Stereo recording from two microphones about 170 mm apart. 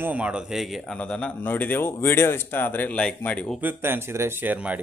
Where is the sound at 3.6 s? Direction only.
15° right (ahead or behind).